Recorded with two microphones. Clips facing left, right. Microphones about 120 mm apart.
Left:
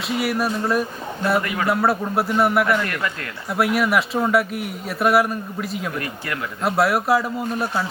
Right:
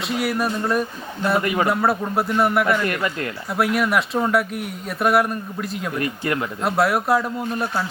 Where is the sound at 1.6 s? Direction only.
Centre (ahead or behind).